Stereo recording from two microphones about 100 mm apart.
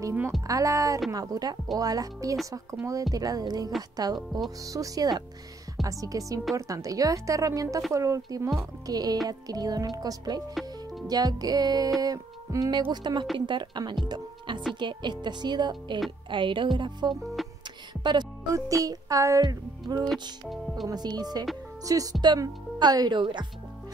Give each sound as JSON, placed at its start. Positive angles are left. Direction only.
{"t": 0.5, "sound": "speech", "side_deg": -35}
{"t": 10.5, "sound": "music", "side_deg": 0}
{"t": 11.1, "sound": "speech", "side_deg": -40}
{"t": 12.0, "sound": "music", "side_deg": -40}
{"t": 12.9, "sound": "speech", "side_deg": -50}
{"t": 17.1, "sound": "speech", "side_deg": 0}
{"t": 18.5, "sound": "speech", "side_deg": -35}
{"t": 20.4, "sound": "speech", "side_deg": 0}
{"t": 20.9, "sound": "speech", "side_deg": -45}
{"t": 22.2, "sound": "speech", "side_deg": -45}